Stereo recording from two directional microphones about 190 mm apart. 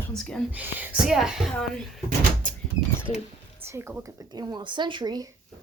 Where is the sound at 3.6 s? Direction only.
15° right (ahead or behind).